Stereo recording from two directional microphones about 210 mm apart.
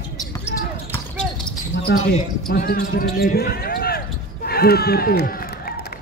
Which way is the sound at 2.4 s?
45° left (ahead or behind).